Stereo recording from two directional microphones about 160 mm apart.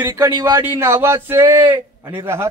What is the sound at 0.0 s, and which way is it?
A man's voice, 25° right (ahead or behind).